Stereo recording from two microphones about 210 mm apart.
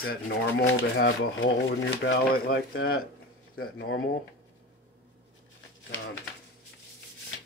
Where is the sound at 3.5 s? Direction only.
85° left.